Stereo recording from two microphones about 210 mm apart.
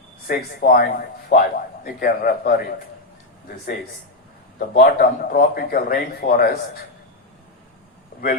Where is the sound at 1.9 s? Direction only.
45° left (ahead or behind).